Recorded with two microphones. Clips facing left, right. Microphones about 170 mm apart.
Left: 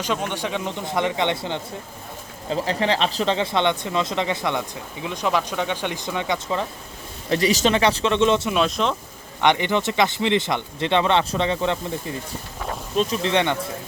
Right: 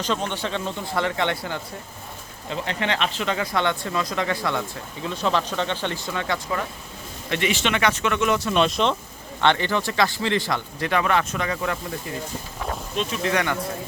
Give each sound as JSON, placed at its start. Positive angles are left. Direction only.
{"t": 0.0, "sound": "speech", "side_deg": 10}
{"t": 2.5, "sound": "speech", "side_deg": 35}
{"t": 7.3, "sound": "speech", "side_deg": 35}
{"t": 8.5, "sound": "speech", "side_deg": 0}
{"t": 9.4, "sound": "speech", "side_deg": 15}
{"t": 13.2, "sound": "speech", "side_deg": 25}